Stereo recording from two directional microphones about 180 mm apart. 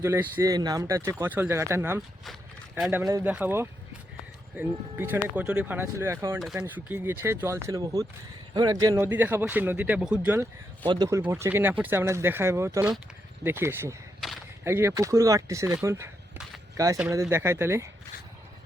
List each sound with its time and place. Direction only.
0.0 s speech: 15° right (ahead or behind)
2.7 s speech: centre (ahead or behind)
3.1 s speech: 10° right (ahead or behind)
6.4 s speech: 5° right (ahead or behind)
10.8 s speech: 25° right (ahead or behind)